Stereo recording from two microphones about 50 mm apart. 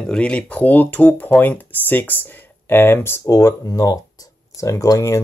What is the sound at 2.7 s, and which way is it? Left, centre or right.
Speech, left.